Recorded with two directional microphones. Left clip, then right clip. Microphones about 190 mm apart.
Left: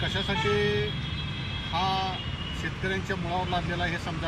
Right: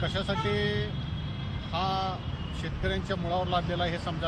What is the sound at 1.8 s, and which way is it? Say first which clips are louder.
Speech: left 1 dB; 25° right (ahead or behind).